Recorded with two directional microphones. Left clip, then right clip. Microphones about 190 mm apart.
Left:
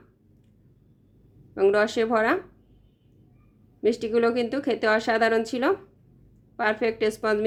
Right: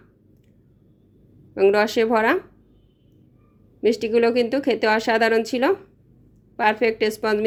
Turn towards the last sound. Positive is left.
turn(degrees=-15)  # may be behind; listen again after turning